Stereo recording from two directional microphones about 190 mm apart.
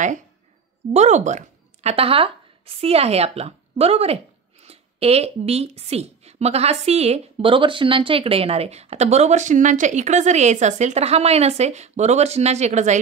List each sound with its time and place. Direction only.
0.9 s speech: 40° right (ahead or behind)